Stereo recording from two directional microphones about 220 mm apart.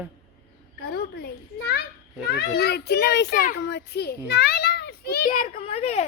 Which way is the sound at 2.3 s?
45° left (ahead or behind).